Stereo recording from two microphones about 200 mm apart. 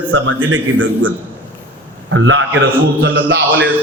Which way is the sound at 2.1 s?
75° right (ahead or behind).